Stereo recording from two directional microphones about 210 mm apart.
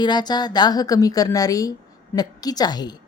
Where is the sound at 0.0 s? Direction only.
20° left (ahead or behind).